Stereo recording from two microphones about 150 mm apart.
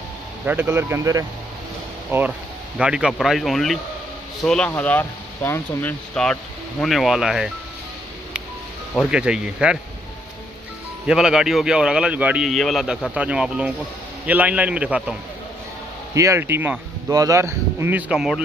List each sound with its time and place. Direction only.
0.5 s a man's voice: 15° right (ahead or behind)
9.1 s a man's voice: 5° right (ahead or behind)
11.1 s a man's voice: 5° right (ahead or behind)
16.2 s speech: 20° right (ahead or behind)